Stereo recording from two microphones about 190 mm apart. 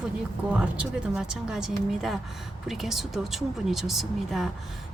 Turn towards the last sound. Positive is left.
turn(degrees=0)  # may be behind; listen again after turning